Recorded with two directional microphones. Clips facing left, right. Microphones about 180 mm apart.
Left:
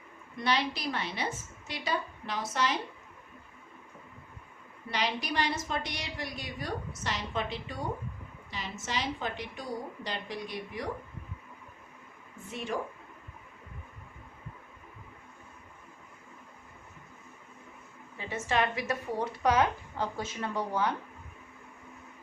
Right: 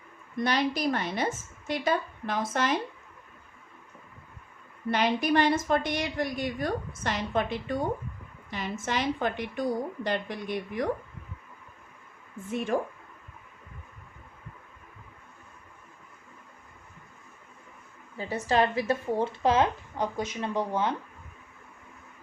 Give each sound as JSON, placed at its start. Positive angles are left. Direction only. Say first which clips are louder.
{"t": 0.4, "sound": "a woman's voice", "louder": "right 4 dB", "side_deg": -45}
{"t": 4.9, "sound": "a woman's voice", "louder": "right 8 dB", "side_deg": -55}
{"t": 12.5, "sound": "a woman's voice", "louder": "right 7 dB", "side_deg": -50}
{"t": 18.2, "sound": "a woman's voice", "louder": "right 5 dB", "side_deg": -35}